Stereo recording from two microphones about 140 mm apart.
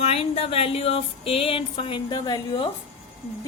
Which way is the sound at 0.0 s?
45° left (ahead or behind).